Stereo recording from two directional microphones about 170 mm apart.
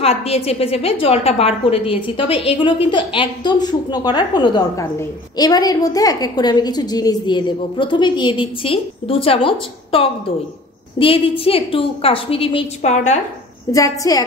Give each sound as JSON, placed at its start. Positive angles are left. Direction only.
{"t": 0.0, "sound": "a woman's voice", "side_deg": 35}
{"t": 13.7, "sound": "a woman's voice", "side_deg": 20}